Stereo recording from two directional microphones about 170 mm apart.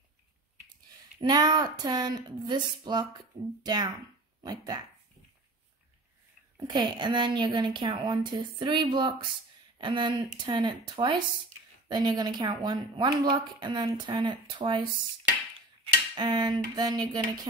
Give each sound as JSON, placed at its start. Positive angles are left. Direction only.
{"t": 1.2, "sound": "speech", "side_deg": -25}
{"t": 6.5, "sound": "speech", "side_deg": -25}
{"t": 16.2, "sound": "speech", "side_deg": -25}